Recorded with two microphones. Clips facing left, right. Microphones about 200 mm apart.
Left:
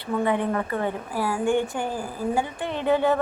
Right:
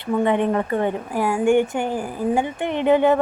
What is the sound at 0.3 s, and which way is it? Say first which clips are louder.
A woman's voice: right 4 dB; 20° right (ahead or behind).